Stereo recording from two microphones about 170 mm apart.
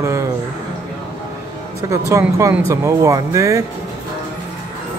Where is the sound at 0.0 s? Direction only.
15° right (ahead or behind).